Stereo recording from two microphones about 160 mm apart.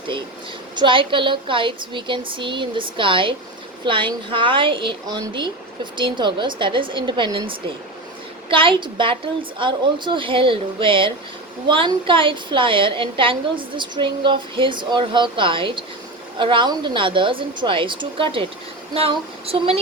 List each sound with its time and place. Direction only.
0.8 s a woman's voice: 30° right (ahead or behind)